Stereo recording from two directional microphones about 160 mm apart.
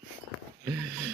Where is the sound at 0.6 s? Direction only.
15° right (ahead or behind).